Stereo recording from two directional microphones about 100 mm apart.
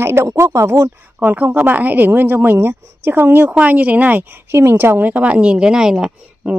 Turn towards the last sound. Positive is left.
turn(degrees=-10)  # may be behind; listen again after turning